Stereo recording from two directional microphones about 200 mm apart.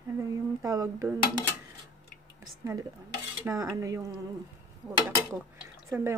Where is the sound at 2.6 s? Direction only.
15° right (ahead or behind).